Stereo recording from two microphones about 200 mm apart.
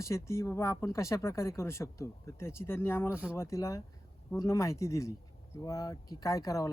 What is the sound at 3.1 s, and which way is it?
Speech, 5° right (ahead or behind).